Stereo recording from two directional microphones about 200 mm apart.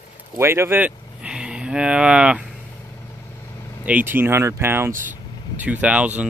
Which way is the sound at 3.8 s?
10° right (ahead or behind).